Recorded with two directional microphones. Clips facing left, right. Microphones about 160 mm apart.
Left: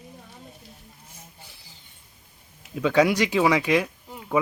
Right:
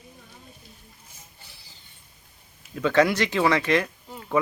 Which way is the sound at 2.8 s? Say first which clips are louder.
Left 1 dB; 10° left (ahead or behind).